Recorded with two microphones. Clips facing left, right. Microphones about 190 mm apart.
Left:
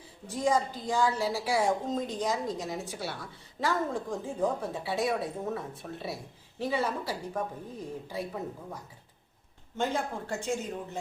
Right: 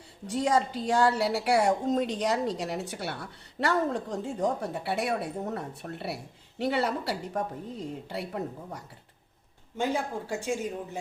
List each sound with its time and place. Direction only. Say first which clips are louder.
0.3 s a woman's voice: right 2 dB; 70° right (ahead or behind)
9.7 s speech: right 2 dB; 10° right (ahead or behind)